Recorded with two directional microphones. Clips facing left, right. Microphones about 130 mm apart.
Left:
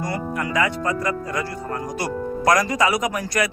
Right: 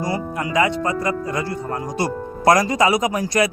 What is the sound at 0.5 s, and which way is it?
Speech, 25° right (ahead or behind).